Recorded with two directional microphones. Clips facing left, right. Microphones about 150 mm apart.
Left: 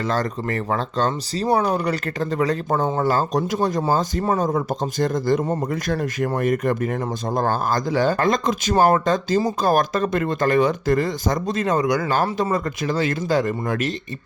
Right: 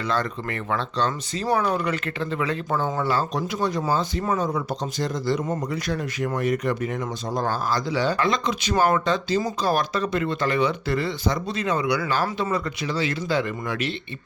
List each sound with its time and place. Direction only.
0.0 s speech: 45° left (ahead or behind)